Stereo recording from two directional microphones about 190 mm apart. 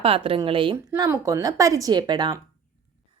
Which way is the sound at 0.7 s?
15° right (ahead or behind).